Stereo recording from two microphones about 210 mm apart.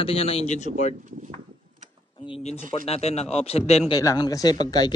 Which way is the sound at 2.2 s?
30° left (ahead or behind).